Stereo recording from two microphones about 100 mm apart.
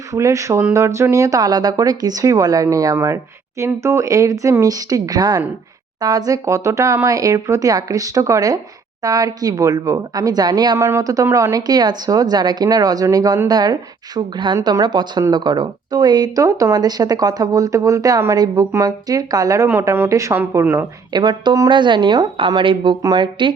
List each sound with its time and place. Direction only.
0.1 s a woman's voice: 30° right (ahead or behind)
21.1 s a woman's voice: 45° right (ahead or behind)